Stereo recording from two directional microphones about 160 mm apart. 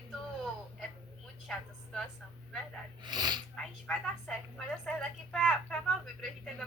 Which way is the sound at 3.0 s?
25° right (ahead or behind).